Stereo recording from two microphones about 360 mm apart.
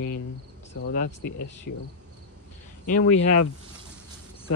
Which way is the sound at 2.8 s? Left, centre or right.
Left.